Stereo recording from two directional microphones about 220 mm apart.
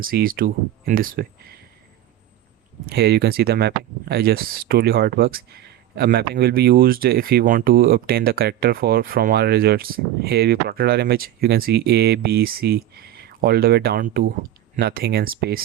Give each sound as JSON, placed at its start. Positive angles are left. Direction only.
{"t": 0.0, "sound": "speech", "side_deg": -40}
{"t": 2.8, "sound": "speech", "side_deg": -45}